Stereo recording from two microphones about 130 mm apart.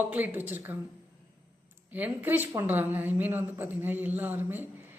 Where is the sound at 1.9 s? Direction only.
15° right (ahead or behind).